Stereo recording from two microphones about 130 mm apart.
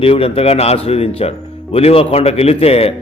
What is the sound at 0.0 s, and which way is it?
Speech, 45° left (ahead or behind).